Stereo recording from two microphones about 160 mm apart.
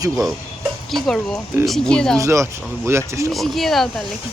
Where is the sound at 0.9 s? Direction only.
Centre (ahead or behind).